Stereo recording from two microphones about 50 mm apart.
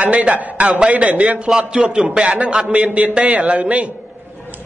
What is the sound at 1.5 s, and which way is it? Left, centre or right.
A man's voice, centre.